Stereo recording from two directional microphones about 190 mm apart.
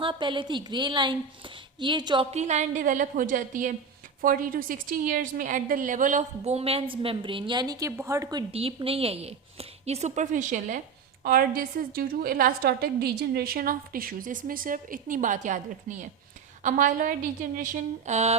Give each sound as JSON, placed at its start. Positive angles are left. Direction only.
{"t": 0.0, "sound": "a woman's voice", "side_deg": -25}
{"t": 2.3, "sound": "a woman's voice", "side_deg": -35}